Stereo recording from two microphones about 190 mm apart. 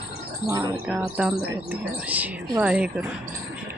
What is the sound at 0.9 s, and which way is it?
Speech, 5° right (ahead or behind).